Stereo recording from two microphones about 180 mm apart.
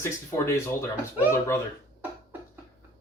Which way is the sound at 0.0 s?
15° left (ahead or behind).